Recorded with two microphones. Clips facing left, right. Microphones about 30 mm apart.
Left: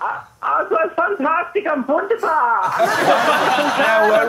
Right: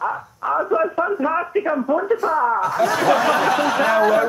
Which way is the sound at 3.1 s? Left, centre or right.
Left.